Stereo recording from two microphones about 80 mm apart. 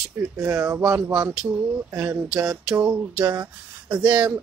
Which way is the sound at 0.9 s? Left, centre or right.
Right.